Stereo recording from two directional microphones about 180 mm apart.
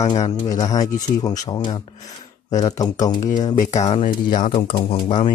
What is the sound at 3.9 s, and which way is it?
Speech, 35° left (ahead or behind).